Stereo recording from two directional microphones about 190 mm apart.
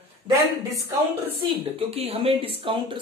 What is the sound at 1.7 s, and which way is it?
Speech, 30° right (ahead or behind).